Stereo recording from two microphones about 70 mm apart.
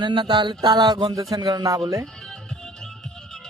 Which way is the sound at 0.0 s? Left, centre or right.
Right.